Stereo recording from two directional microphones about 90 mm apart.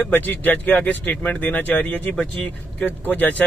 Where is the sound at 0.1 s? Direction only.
20° left (ahead or behind).